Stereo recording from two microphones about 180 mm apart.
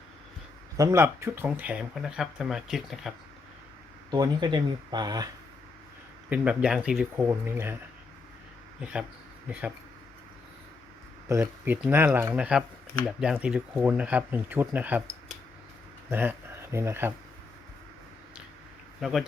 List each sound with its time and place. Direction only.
0.8 s speech: 15° right (ahead or behind)
4.1 s speech: 25° right (ahead or behind)
6.3 s speech: 5° right (ahead or behind)
8.8 s speech: 5° right (ahead or behind)
11.3 s speech: 15° right (ahead or behind)
18.9 s speech: centre (ahead or behind)